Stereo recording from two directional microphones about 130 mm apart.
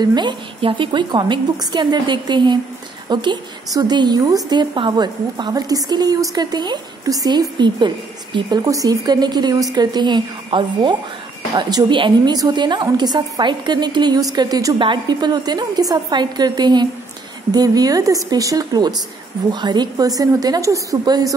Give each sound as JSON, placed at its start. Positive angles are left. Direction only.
{"t": 0.0, "sound": "a woman's voice", "side_deg": -35}